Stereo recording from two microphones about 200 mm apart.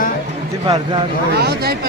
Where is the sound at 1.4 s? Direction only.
55° right (ahead or behind).